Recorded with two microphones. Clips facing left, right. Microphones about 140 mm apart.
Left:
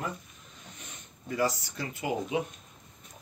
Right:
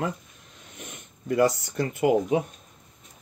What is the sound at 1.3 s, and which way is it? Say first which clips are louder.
Speech: right 8 dB; 55° right (ahead or behind).